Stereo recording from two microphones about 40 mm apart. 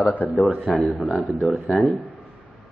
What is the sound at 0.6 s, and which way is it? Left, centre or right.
Speech, centre.